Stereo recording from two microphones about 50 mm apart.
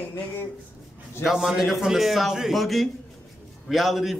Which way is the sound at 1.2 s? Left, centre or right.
Centre.